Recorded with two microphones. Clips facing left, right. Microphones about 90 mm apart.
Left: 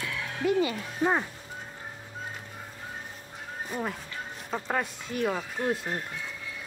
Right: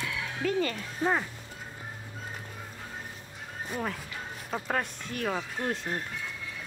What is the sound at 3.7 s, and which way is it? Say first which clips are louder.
Speech: even; 5° left (ahead or behind).